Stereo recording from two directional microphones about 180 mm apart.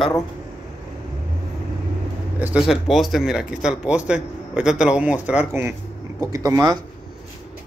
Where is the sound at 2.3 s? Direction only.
5° right (ahead or behind).